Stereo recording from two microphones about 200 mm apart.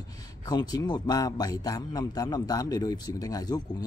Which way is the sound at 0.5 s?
20° left (ahead or behind).